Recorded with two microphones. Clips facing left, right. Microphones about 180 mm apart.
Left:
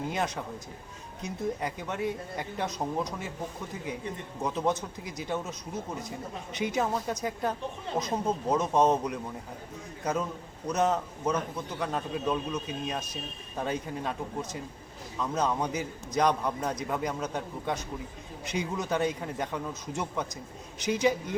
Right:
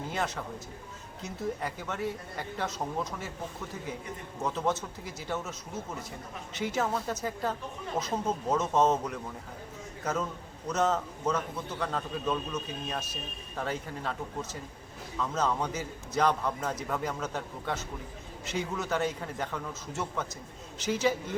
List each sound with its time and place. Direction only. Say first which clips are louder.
0.1 s a man's voice: left 2 dB; 15° left (ahead or behind)
4.4 s a man's voice: left 1 dB; 15° left (ahead or behind)